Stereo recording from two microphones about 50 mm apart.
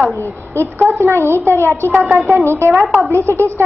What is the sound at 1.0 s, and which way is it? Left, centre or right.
Speech, right.